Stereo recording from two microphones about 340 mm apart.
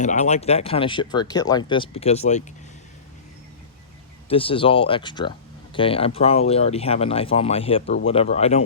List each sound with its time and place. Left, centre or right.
0.0 s speech: left
4.3 s speech: centre